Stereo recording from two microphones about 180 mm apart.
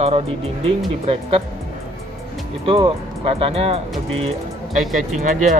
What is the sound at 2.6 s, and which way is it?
Speech, 30° right (ahead or behind).